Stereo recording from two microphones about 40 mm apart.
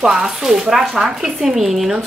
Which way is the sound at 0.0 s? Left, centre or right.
Centre.